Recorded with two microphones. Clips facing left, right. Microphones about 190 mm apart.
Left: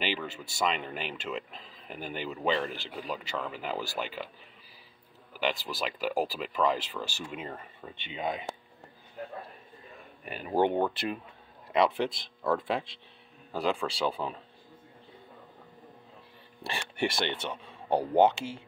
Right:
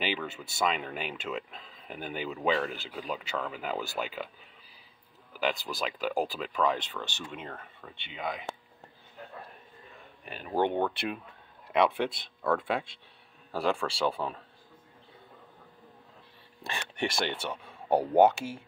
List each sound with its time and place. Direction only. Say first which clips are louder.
0.0 s speech: even; centre (ahead or behind)
5.4 s speech: even; centre (ahead or behind)
7.9 s speech: left 3 dB; 20° left (ahead or behind)
10.2 s speech: left 2 dB; 10° left (ahead or behind)
17.4 s speech: even; 5° right (ahead or behind)